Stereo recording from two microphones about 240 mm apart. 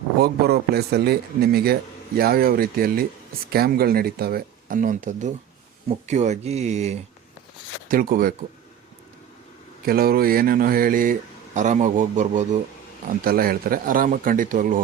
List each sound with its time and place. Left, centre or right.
0.2 s speech: right
9.8 s speech: right